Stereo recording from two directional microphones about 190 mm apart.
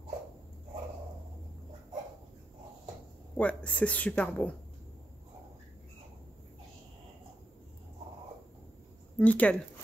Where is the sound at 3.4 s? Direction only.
5° left (ahead or behind).